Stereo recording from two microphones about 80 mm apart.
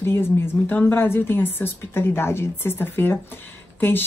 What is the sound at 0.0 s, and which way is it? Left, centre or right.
Speech, left.